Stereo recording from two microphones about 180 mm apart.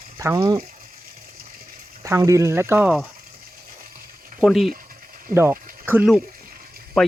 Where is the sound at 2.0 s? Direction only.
15° right (ahead or behind).